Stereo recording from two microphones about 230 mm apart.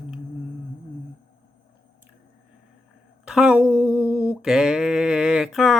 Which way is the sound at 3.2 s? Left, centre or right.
Centre.